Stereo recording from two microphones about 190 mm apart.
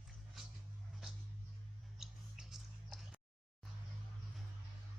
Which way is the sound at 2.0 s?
Centre (ahead or behind).